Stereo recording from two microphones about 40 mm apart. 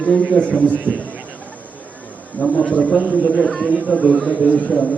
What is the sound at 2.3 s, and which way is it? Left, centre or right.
A man's voice, left.